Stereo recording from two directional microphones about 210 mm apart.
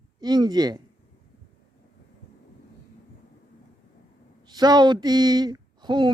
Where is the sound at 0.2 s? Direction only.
20° right (ahead or behind).